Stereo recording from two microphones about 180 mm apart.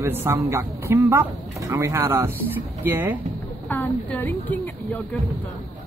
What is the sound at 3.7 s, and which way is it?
A woman's voice, 15° left (ahead or behind).